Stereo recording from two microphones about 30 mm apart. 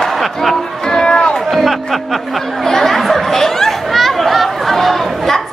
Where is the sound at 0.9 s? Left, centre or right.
Left.